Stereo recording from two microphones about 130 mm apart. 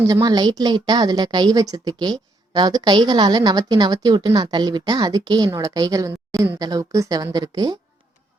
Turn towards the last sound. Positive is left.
turn(degrees=-30)  # may be behind; listen again after turning